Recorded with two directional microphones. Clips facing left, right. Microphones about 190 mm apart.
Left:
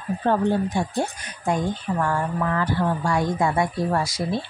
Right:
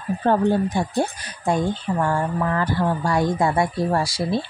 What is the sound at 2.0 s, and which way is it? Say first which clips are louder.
Speech: right 2 dB; 35° right (ahead or behind).